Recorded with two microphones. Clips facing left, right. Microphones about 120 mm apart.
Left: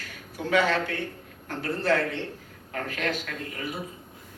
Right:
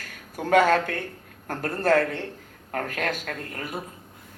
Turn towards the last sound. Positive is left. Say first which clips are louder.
# right 1 dB
turn(degrees=-50)  # may be behind; listen again after turning